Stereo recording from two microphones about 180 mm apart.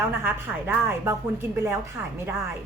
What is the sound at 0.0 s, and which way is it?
A woman's voice, 10° right (ahead or behind).